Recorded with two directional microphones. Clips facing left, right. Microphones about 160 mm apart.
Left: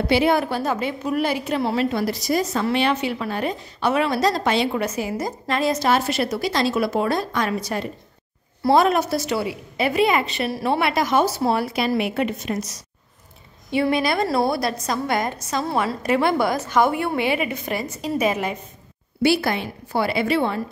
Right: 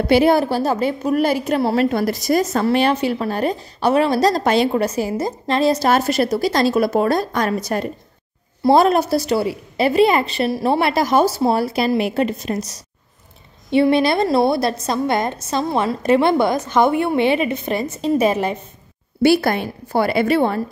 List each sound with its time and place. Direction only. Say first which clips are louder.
0.1 s a woman's voice: right 5 dB; 40° right (ahead or behind)
5.9 s a woman's voice: right 4 dB; 45° right (ahead or behind)
8.6 s a woman's voice: right 4 dB; 35° right (ahead or behind)
19.2 s a woman's voice: right 5 dB; 45° right (ahead or behind)